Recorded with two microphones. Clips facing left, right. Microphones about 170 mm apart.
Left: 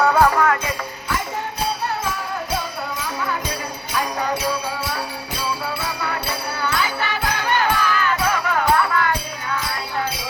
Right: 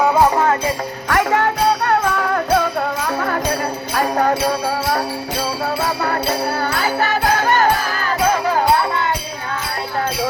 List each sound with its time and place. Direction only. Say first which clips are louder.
0.0 s music: right 2 dB; 15° right (ahead or behind)
1.0 s music: right 11 dB; 70° right (ahead or behind); by 9.1 s 25° right (ahead or behind)